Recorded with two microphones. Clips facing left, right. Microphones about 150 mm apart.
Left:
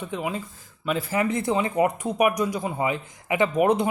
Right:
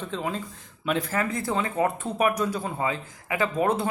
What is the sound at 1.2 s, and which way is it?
Speech, 20° left (ahead or behind).